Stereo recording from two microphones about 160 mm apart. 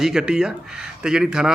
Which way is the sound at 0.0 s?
5° right (ahead or behind).